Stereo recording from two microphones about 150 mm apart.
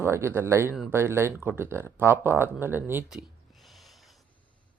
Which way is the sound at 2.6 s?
15° right (ahead or behind).